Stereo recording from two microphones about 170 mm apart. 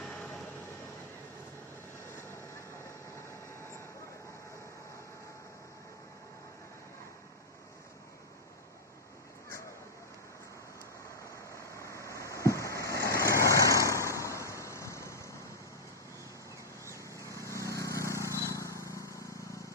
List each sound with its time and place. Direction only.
0.0 s train: 5° left (ahead or behind)
2.1 s vehicle: 15° left (ahead or behind)
11.5 s vehicle: 15° left (ahead or behind)
14.2 s a sound: 15° left (ahead or behind)
17.2 s vehicle: 15° left (ahead or behind)